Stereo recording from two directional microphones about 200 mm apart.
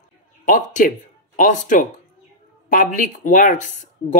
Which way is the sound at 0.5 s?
40° left (ahead or behind).